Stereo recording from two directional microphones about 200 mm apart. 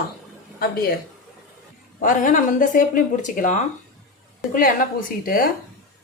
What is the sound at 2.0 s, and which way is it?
Speech, 40° left (ahead or behind).